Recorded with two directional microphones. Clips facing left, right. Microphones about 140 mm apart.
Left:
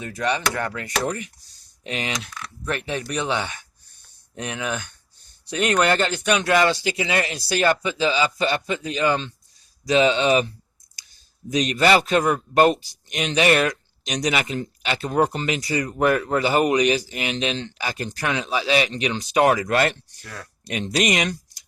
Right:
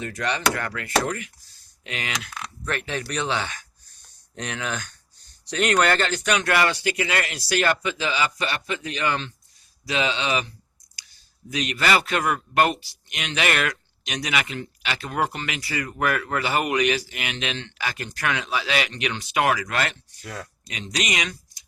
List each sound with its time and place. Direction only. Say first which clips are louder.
0.0 s speech: left 1 dB; 15° left (ahead or behind)
2.0 s speech: left 3 dB; 30° left (ahead or behind)
2.6 s speech: left 2 dB; 15° left (ahead or behind)
8.0 s speech: left 6 dB; 30° left (ahead or behind)
9.8 s speech: left 7 dB; 40° left (ahead or behind)
11.5 s speech: left 5 dB; 40° left (ahead or behind)
19.6 s speech: left 6 dB; 45° left (ahead or behind)